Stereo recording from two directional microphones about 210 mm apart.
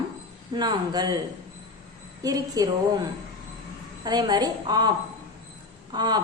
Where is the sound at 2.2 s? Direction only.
15° right (ahead or behind).